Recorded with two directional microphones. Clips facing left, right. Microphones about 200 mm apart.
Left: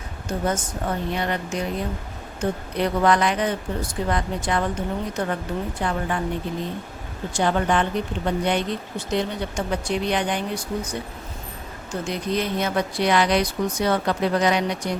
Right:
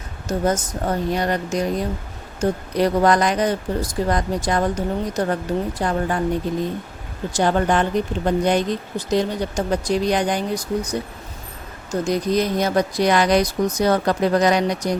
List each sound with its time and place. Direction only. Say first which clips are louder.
0.3 s speech: right 4 dB; 40° right (ahead or behind)
7.3 s speech: right 3 dB; 40° right (ahead or behind)